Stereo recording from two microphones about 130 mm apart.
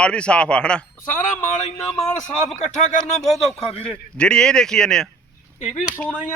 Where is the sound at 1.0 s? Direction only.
85° left; by 1.7 s 65° left (ahead or behind).